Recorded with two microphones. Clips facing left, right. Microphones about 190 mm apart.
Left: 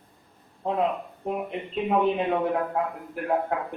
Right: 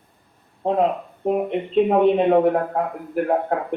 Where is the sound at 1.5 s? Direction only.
30° right (ahead or behind).